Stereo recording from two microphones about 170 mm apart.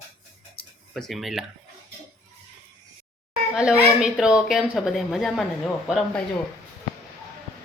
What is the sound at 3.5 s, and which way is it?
Speech, 5° right (ahead or behind).